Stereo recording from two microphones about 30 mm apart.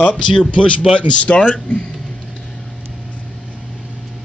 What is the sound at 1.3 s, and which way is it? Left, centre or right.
Speech, left.